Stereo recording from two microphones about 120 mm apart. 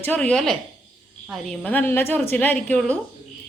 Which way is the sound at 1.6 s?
15° left (ahead or behind).